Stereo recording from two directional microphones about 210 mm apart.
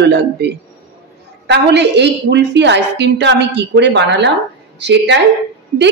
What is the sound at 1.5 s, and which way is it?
A woman's voice, 55° right (ahead or behind).